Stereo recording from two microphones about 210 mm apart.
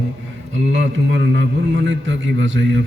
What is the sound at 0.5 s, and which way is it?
A man's voice, 60° right (ahead or behind).